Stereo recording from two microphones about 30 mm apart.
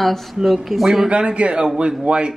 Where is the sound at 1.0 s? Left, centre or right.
Right.